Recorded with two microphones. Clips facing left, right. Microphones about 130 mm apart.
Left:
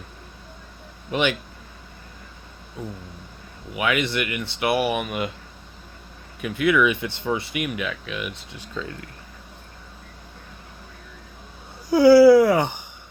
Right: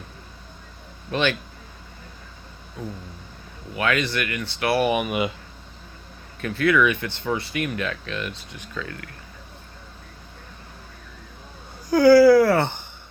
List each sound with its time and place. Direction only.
1.1 s speech: 15° left (ahead or behind)
2.8 s speech: 15° left (ahead or behind)
4.8 s speech: centre (ahead or behind)
6.4 s speech: 15° left (ahead or behind)
8.7 s speech: 25° left (ahead or behind)
11.9 s speech: 25° left (ahead or behind)